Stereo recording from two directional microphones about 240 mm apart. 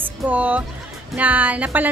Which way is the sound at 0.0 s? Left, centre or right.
Centre.